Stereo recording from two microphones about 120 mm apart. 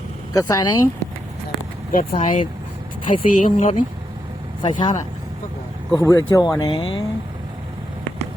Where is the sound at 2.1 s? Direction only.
50° left (ahead or behind).